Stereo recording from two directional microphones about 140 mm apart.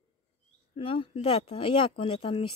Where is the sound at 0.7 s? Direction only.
40° left (ahead or behind).